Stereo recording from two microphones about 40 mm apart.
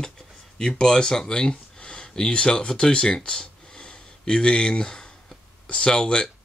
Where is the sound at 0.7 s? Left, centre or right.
Centre.